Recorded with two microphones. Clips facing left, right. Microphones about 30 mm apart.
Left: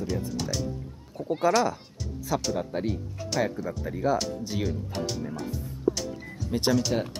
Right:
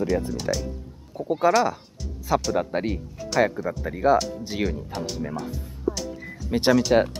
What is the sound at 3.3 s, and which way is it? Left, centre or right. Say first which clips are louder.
Speech: right 6 dB; centre.